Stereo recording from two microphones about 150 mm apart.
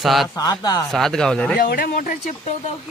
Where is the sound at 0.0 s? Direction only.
Centre (ahead or behind).